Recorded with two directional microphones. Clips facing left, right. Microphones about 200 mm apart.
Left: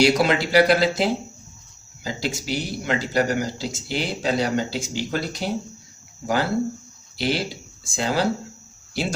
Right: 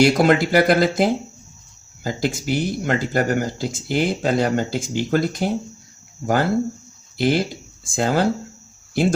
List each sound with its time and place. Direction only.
0.0 s speech: 50° right (ahead or behind)